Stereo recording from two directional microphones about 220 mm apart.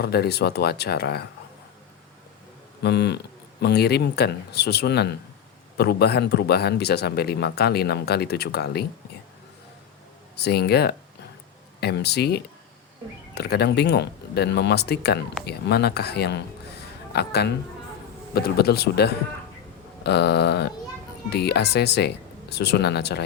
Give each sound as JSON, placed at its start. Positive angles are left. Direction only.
{"t": 0.0, "sound": "a man's voice", "side_deg": 45}
{"t": 2.8, "sound": "a man's voice", "side_deg": 50}
{"t": 10.3, "sound": "a man's voice", "side_deg": 50}